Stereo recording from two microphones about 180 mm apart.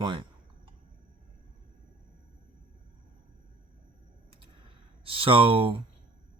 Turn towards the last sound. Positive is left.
turn(degrees=-30)  # may be behind; listen again after turning